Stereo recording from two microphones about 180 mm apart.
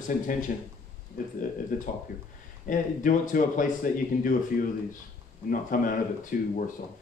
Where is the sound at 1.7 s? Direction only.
50° left (ahead or behind).